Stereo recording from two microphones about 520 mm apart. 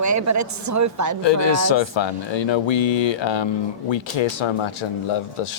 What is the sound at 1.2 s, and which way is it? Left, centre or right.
Speech, left.